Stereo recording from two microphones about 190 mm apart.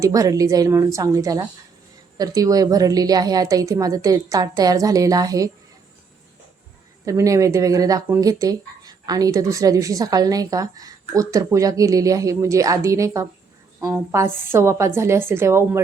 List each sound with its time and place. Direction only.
0.0 s a woman's voice: 15° right (ahead or behind)
7.0 s speech: 15° right (ahead or behind)